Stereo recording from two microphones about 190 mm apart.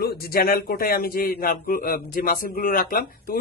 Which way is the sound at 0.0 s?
55° left (ahead or behind).